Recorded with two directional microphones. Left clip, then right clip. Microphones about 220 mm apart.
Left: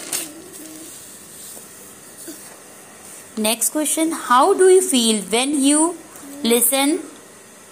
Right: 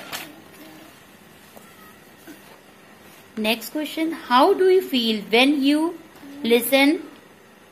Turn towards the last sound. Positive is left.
turn(degrees=10)  # may be behind; listen again after turning